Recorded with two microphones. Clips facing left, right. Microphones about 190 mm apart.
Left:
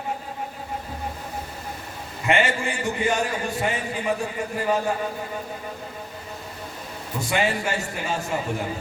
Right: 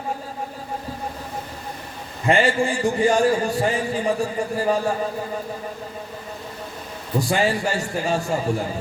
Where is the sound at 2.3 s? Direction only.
35° right (ahead or behind).